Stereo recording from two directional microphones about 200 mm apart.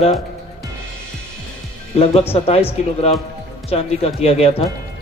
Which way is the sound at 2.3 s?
30° left (ahead or behind).